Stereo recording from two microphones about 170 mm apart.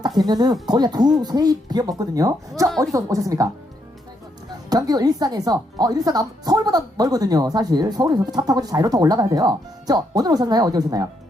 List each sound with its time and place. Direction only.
0.2 s speech: 25° right (ahead or behind)
2.6 s a woman's voice: centre (ahead or behind)
2.9 s speech: 20° right (ahead or behind)
4.7 s speech: 20° right (ahead or behind)